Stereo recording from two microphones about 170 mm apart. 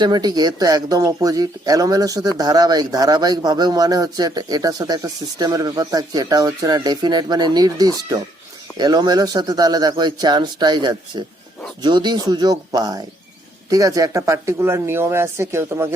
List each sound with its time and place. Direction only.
0.0 s a man's voice: 25° right (ahead or behind)